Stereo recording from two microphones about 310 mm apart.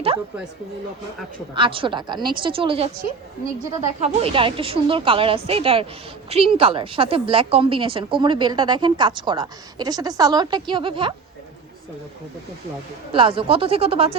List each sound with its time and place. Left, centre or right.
1.5 s a woman's voice: centre
13.1 s a woman's voice: centre